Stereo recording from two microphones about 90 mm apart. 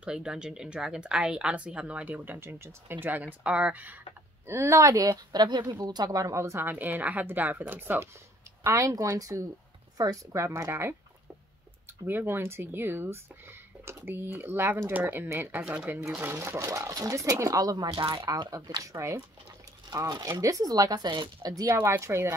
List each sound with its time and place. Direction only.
0.0 s speech: 10° right (ahead or behind)
4.5 s a woman's voice: 30° right (ahead or behind)
8.6 s a woman's voice: 40° right (ahead or behind)
10.3 s a woman's voice: 30° right (ahead or behind)
12.1 s speech: 25° right (ahead or behind)
16.2 s a woman's voice: 25° right (ahead or behind); by 18.8 s 50° right (ahead or behind)
18.8 s a woman's voice: 35° right (ahead or behind)
19.9 s speech: 45° right (ahead or behind)
21.6 s speech: 25° right (ahead or behind)